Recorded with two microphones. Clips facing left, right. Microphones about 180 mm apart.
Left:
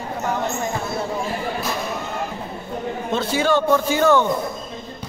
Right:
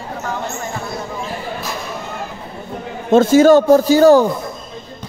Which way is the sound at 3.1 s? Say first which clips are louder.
Right 11 dB; 45° right (ahead or behind).